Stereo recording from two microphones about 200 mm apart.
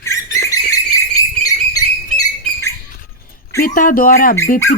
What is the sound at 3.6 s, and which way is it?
Speech, 45° left (ahead or behind).